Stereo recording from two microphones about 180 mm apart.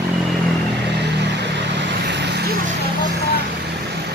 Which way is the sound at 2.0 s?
70° right (ahead or behind).